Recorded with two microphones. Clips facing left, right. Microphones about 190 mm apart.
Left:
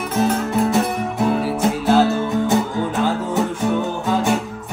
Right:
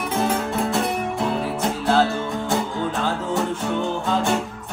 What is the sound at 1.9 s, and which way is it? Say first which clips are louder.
Music: left 4 dB; 20° left (ahead or behind).